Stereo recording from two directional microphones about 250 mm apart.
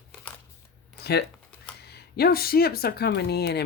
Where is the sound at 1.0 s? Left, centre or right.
Left.